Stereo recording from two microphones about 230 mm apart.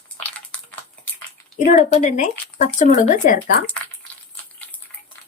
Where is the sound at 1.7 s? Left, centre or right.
Left.